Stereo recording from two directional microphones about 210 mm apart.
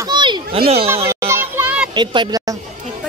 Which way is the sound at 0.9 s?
10° right (ahead or behind).